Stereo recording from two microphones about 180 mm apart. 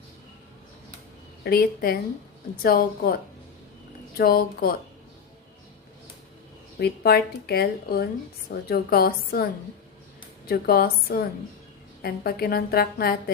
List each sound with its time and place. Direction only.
1.5 s speech: 55° left (ahead or behind)
4.2 s speech: 55° left (ahead or behind)
6.7 s speech: 60° left (ahead or behind)